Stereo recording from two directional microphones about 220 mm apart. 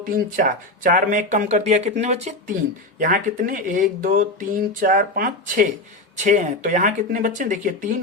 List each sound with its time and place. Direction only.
0.0 s speech: 40° right (ahead or behind)